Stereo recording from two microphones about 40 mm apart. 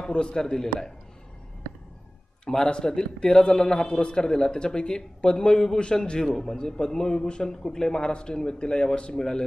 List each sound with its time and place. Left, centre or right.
0.0 s a man's voice: left
2.5 s a man's voice: centre